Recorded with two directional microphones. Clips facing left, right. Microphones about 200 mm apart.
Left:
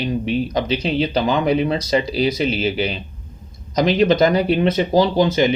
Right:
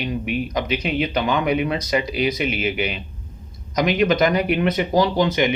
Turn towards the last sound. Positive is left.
turn(degrees=30)  # may be behind; listen again after turning